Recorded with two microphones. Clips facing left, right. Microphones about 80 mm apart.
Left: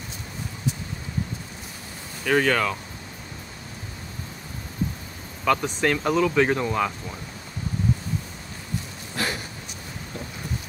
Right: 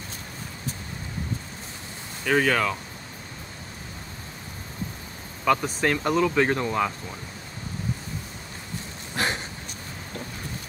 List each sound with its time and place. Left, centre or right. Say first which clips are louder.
2.2 s speech: left 1 dB; centre
5.4 s speech: even; centre
9.1 s a sound: right 1 dB; right